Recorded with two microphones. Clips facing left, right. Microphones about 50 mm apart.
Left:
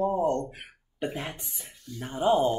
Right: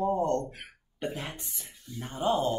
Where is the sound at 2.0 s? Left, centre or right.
Centre.